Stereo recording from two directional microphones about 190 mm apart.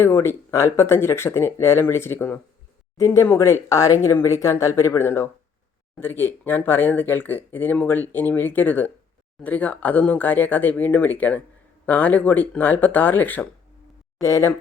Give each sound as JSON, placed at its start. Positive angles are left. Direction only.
{"t": 0.0, "sound": "speech", "side_deg": 15}